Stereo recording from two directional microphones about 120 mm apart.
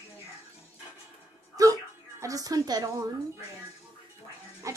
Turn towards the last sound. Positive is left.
turn(degrees=-25)  # may be behind; listen again after turning